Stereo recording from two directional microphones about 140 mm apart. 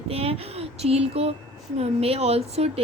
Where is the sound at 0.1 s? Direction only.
45° right (ahead or behind).